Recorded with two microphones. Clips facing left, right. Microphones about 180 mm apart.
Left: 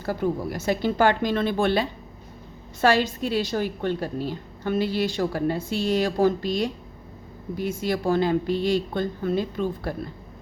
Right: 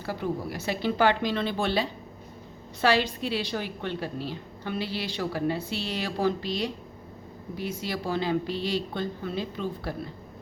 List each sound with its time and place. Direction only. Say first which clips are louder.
0.0 s a woman's voice: left 5 dB; 45° left (ahead or behind)